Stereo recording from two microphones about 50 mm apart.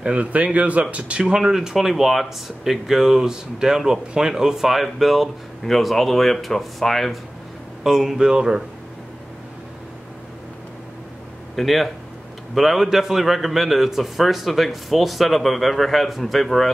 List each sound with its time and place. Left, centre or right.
0.0 s speech: right
1.2 s a man's voice: centre
7.8 s speech: centre
11.5 s a man's voice: centre